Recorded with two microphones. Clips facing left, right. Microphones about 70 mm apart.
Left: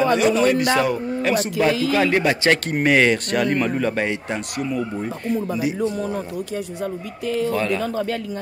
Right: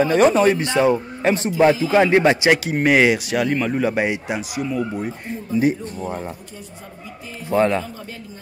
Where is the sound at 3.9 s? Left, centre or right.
Centre.